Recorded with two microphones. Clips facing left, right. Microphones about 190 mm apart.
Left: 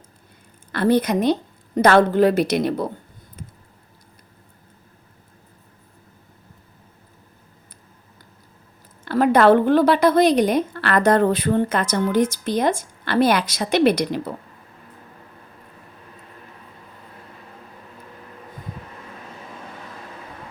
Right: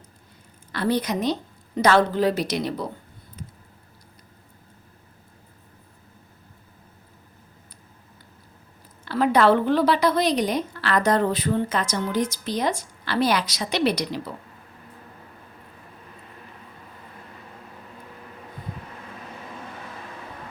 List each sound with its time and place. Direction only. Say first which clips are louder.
0.7 s a woman's voice: left 6 dB; 55° left (ahead or behind)
9.0 s a woman's voice: left 4 dB; 50° left (ahead or behind)